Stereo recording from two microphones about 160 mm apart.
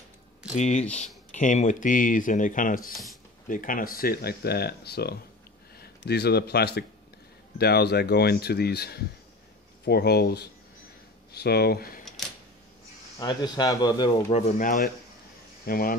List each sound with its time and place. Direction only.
0.6 s speech: 45° left (ahead or behind); by 12.0 s 75° left (ahead or behind)
13.2 s speech: 25° left (ahead or behind)
14.3 s speech: 50° left (ahead or behind)
15.6 s speech: 65° left (ahead or behind)